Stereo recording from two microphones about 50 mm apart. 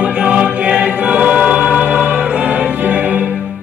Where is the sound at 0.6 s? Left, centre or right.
Right.